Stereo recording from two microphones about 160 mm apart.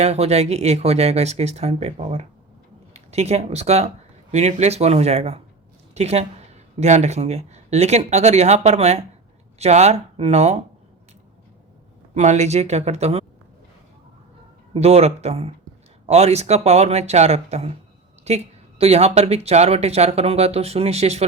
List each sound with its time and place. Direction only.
0.0 s speech: 40° right (ahead or behind)
12.1 s speech: 45° right (ahead or behind)
14.7 s speech: 40° right (ahead or behind)